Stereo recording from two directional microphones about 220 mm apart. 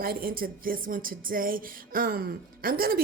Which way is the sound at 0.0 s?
40° right (ahead or behind).